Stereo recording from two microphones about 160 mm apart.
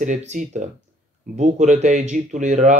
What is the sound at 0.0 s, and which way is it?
Speech, 50° right (ahead or behind).